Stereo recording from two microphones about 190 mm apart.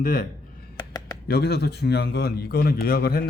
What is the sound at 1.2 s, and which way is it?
A man's voice, 60° left (ahead or behind).